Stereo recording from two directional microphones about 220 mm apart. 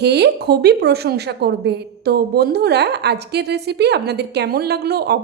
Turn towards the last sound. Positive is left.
turn(degrees=-45)  # may be behind; listen again after turning